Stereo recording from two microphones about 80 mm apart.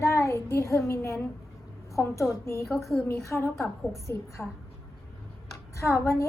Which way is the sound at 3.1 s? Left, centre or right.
Left.